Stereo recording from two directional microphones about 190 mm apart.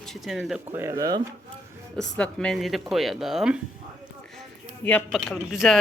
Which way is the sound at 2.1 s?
5° left (ahead or behind).